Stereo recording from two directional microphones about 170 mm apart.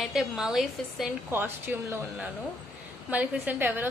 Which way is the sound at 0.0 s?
Centre (ahead or behind).